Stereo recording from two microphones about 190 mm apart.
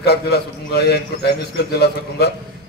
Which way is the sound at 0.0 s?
55° left (ahead or behind).